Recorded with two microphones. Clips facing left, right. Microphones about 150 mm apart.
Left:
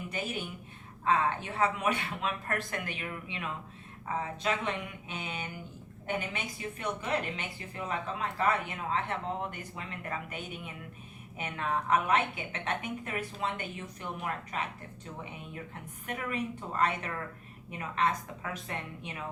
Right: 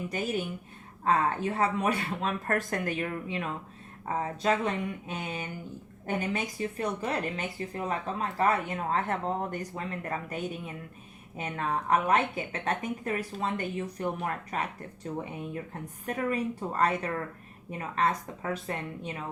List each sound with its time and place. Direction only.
1.0 s speech: 40° right (ahead or behind)